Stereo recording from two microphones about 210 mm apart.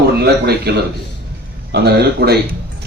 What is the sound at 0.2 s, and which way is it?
Speech, 50° right (ahead or behind).